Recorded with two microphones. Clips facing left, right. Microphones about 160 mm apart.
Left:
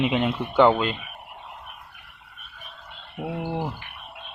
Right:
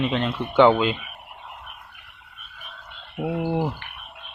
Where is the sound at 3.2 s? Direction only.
5° right (ahead or behind).